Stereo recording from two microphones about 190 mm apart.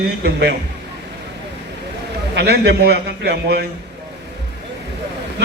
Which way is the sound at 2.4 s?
60° right (ahead or behind).